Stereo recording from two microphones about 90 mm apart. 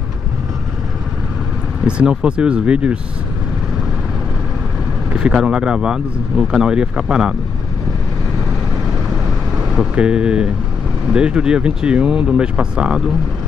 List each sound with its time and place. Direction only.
1.9 s speech: 10° right (ahead or behind)
5.1 s speech: 10° right (ahead or behind)
9.8 s speech: 10° right (ahead or behind)